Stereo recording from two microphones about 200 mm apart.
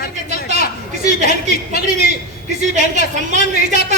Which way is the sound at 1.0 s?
35° right (ahead or behind).